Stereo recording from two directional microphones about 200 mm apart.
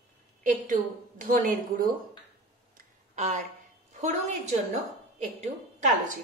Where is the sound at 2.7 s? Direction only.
40° right (ahead or behind).